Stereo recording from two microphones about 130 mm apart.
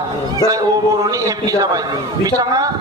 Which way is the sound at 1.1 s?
25° right (ahead or behind).